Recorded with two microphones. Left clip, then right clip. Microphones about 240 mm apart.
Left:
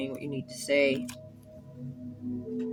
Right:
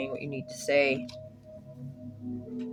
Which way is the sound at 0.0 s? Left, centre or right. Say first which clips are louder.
Right 1 dB; right.